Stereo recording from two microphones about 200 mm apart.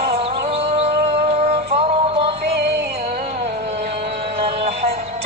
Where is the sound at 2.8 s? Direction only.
50° right (ahead or behind).